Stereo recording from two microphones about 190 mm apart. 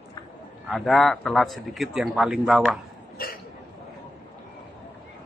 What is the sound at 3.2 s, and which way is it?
Hiccup, 50° left (ahead or behind).